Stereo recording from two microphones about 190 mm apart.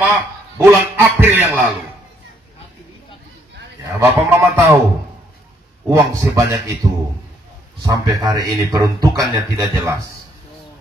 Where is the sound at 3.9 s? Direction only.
15° right (ahead or behind).